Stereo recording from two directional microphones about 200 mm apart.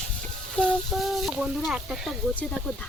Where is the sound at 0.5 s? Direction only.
5° left (ahead or behind).